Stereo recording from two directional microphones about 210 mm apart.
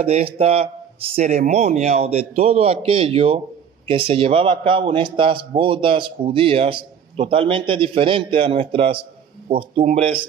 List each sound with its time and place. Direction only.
0.0 s a man's voice: 30° right (ahead or behind)